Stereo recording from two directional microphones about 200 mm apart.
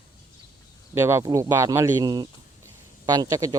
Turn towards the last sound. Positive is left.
turn(degrees=-15)  # may be behind; listen again after turning